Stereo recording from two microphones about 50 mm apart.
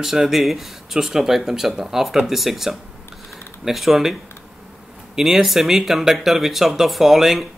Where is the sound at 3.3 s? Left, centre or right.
Centre.